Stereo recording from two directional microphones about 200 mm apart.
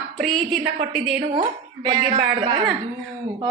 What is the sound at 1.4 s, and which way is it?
Speech, 20° right (ahead or behind).